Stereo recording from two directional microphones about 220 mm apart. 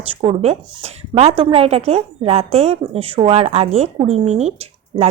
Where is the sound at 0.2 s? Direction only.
30° right (ahead or behind).